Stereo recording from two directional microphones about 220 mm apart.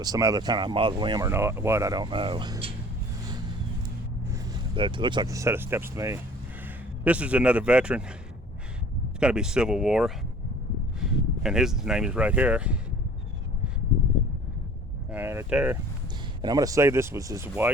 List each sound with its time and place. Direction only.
0.0 s speech: 15° right (ahead or behind)
4.3 s a man's voice: 20° right (ahead or behind); by 8.0 s 5° right (ahead or behind)
9.2 s a man's voice: 5° right (ahead or behind)
15.1 s speech: 10° right (ahead or behind)
16.4 s speech: 15° right (ahead or behind)